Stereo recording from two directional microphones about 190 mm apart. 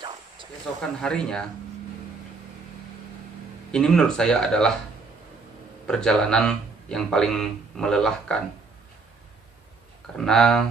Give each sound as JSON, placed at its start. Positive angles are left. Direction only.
{"t": 0.0, "sound": "wild animals", "side_deg": -25}
{"t": 1.0, "sound": "speech", "side_deg": 5}
{"t": 3.7, "sound": "speech", "side_deg": 5}
{"t": 5.9, "sound": "speech", "side_deg": 0}
{"t": 10.1, "sound": "speech", "side_deg": 0}